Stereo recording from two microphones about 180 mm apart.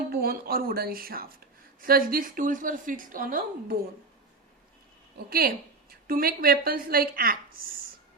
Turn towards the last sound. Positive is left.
turn(degrees=-55)  # may be behind; listen again after turning